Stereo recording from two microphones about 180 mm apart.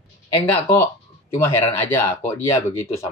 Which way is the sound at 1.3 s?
15° left (ahead or behind).